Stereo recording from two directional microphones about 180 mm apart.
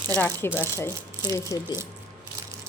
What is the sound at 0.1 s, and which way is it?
A woman's voice, 10° left (ahead or behind).